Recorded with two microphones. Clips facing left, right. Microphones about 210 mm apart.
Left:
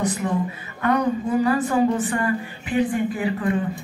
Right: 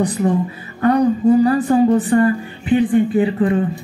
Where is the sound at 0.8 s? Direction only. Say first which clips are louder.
Right 8 dB; 35° right (ahead or behind).